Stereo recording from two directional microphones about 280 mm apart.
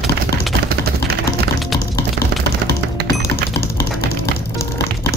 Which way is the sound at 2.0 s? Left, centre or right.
Left.